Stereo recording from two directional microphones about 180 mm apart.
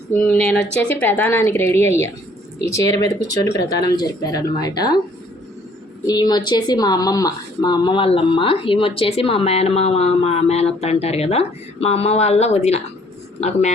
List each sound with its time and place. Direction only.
0.1 s a woman's voice: 5° left (ahead or behind)
6.1 s speech: 20° left (ahead or behind); by 13.7 s 40° left (ahead or behind)